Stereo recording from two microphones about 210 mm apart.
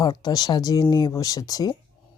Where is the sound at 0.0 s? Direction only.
20° left (ahead or behind).